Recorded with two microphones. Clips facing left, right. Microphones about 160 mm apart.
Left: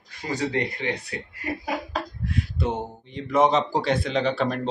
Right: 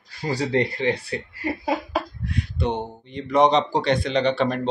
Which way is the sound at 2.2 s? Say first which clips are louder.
Right 1 dB; 5° left (ahead or behind).